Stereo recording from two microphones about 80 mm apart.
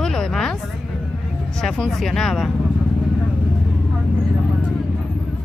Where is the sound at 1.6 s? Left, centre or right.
Centre.